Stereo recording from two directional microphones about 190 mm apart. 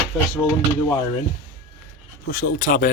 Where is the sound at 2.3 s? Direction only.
50° left (ahead or behind).